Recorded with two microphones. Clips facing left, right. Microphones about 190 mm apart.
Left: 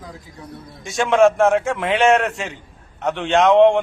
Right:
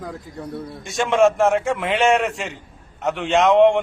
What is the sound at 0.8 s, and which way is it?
A man's voice, centre (ahead or behind).